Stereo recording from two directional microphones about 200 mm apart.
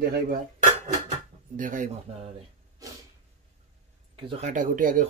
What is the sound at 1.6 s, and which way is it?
Speech, 40° right (ahead or behind).